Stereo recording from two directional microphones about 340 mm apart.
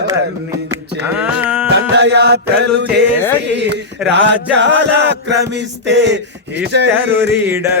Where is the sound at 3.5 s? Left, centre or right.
Right.